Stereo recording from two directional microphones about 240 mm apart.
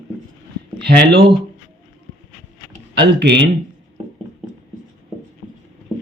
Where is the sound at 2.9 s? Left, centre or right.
Right.